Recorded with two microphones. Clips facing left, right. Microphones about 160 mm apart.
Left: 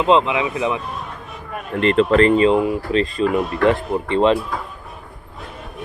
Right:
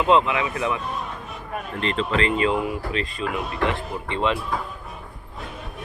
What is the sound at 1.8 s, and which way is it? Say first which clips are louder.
Speech: left 10 dB; 60° left (ahead or behind).